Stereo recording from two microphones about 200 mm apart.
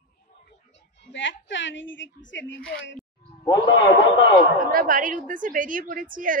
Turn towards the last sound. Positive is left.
turn(degrees=-45)  # may be behind; listen again after turning